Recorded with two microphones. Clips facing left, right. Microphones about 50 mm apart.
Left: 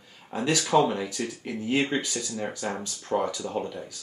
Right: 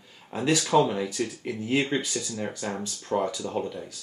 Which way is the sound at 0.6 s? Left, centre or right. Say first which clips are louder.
Left 1 dB; centre.